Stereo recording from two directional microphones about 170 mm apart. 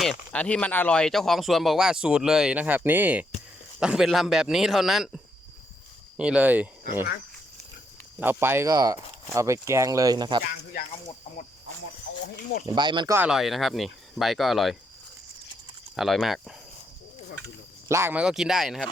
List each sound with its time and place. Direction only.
0.3 s speech: 5° left (ahead or behind); by 6.7 s 10° right (ahead or behind)
8.2 s speech: 10° right (ahead or behind)
12.6 s speech: 25° right (ahead or behind)
13.1 s speech: 5° right (ahead or behind)
16.0 s speech: centre (ahead or behind)
17.8 s speech: 15° right (ahead or behind)